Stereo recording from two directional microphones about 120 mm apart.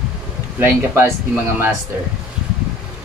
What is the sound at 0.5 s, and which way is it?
Speech, 20° right (ahead or behind).